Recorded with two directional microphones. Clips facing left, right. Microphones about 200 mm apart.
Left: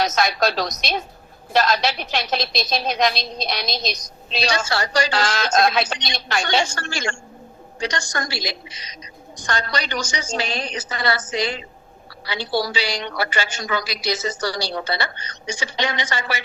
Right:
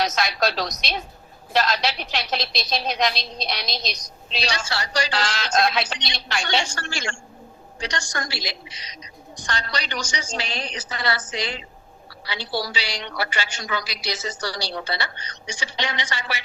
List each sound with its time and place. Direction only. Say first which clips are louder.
0.0 s a woman's voice: left 3 dB; 50° left (ahead or behind)